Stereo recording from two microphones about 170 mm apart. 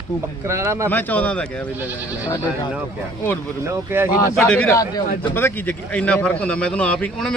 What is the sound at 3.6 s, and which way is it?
Speech, 15° right (ahead or behind).